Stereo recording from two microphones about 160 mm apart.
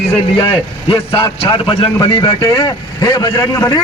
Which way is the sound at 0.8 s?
35° left (ahead or behind).